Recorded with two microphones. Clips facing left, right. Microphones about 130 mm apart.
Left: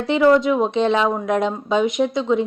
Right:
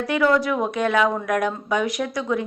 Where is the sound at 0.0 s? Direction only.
25° left (ahead or behind).